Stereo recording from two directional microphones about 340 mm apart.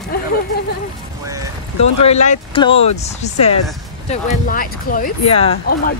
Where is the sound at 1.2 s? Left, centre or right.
Centre.